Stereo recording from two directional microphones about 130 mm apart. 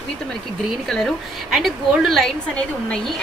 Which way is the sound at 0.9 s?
Centre (ahead or behind).